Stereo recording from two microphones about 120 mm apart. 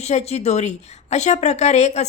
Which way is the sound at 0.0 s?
65° left (ahead or behind).